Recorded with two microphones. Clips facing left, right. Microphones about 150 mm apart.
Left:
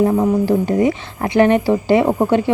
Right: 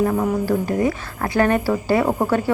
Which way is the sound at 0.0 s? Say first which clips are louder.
Left 5 dB; 25° left (ahead or behind).